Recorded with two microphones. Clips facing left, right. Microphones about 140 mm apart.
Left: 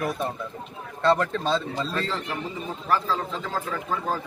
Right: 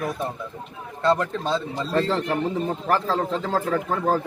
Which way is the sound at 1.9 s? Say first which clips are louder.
Right 7 dB; 65° right (ahead or behind).